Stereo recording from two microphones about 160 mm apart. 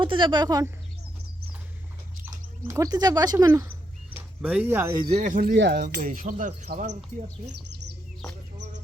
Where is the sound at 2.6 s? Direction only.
20° right (ahead or behind).